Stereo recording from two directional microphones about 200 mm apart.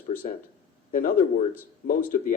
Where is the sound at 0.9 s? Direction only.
45° left (ahead or behind).